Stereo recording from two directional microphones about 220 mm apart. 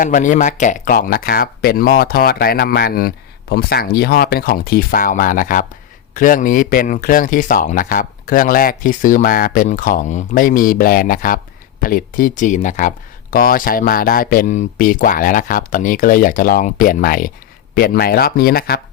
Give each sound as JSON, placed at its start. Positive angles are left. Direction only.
{"t": 0.0, "sound": "speech", "side_deg": 35}